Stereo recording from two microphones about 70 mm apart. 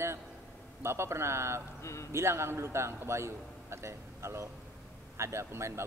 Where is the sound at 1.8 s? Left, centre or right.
Left.